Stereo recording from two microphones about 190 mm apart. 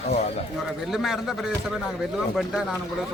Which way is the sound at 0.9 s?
Centre (ahead or behind).